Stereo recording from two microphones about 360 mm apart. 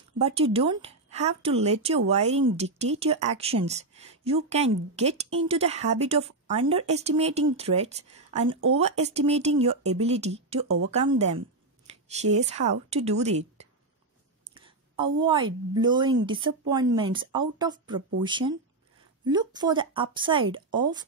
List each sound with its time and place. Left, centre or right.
0.2 s speech: centre
8.5 s speech: right
8.7 s speech: centre
14.5 s a sound: centre
15.8 s speech: centre